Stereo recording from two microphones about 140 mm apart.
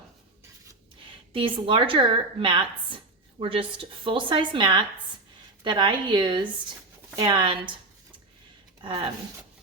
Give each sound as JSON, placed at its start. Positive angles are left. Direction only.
{"t": 1.3, "sound": "a woman's voice", "side_deg": -40}
{"t": 8.8, "sound": "speech", "side_deg": -35}